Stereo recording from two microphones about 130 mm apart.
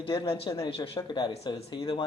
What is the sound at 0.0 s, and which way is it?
Speech, 40° left (ahead or behind).